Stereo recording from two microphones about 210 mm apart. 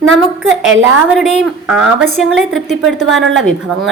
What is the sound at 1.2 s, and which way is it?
A woman's voice, 5° right (ahead or behind).